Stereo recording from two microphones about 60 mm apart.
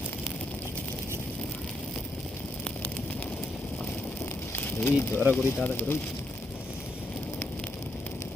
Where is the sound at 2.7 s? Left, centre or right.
Centre.